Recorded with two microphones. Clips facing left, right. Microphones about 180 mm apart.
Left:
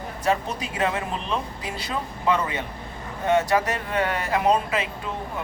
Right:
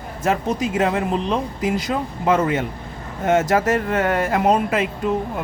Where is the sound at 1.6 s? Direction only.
50° right (ahead or behind).